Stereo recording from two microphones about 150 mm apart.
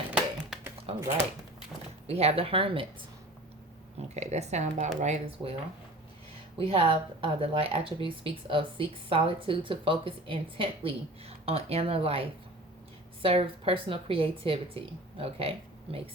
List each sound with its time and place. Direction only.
0.1 s a sound: 10° right (ahead or behind)
2.0 s speech: 45° right (ahead or behind)
4.1 s speech: 45° right (ahead or behind)
6.6 s speech: 40° right (ahead or behind)